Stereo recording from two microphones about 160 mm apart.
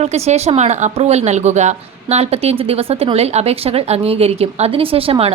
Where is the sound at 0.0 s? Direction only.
40° right (ahead or behind).